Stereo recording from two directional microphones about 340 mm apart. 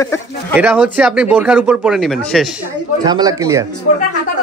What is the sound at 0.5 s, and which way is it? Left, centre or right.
Speech, centre.